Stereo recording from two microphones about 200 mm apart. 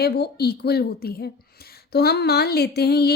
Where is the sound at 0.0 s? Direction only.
55° left (ahead or behind).